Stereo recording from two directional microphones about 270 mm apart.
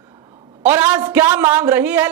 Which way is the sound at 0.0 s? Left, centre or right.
Centre.